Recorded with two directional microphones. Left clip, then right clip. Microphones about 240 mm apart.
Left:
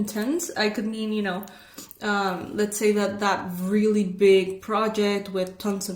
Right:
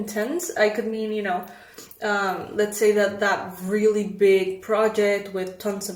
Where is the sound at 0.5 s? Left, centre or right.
Left.